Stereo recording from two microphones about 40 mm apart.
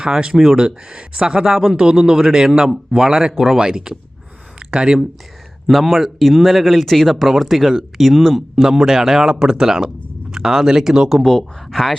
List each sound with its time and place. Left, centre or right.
0.0 s speech: centre
5.6 s speech: centre
8.5 s speech: centre
11.7 s speech: centre